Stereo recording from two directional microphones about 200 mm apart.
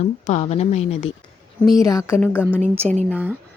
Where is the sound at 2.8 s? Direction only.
35° right (ahead or behind).